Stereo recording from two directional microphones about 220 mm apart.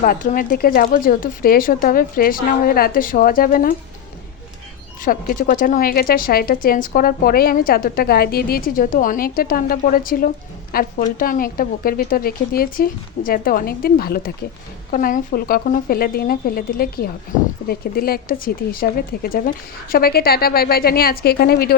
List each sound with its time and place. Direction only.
0.0 s a woman's voice: 35° left (ahead or behind)
5.0 s a woman's voice: 40° left (ahead or behind)